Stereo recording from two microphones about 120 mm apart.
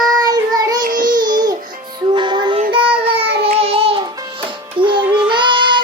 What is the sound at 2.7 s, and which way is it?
Child singing, 45° right (ahead or behind).